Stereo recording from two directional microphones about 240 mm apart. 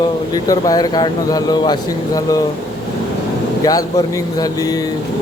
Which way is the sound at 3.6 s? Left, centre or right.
Centre.